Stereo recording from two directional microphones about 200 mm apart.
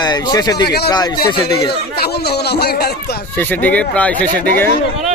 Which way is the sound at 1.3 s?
20° left (ahead or behind).